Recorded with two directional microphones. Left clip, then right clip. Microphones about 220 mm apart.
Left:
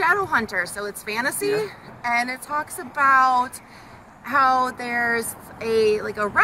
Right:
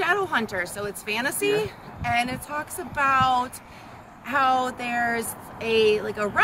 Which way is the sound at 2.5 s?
20° right (ahead or behind).